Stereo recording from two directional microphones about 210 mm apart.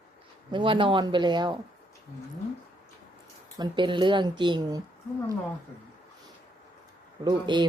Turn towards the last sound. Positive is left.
turn(degrees=-20)  # may be behind; listen again after turning